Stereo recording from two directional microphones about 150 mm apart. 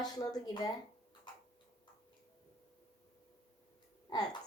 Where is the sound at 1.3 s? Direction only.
30° left (ahead or behind).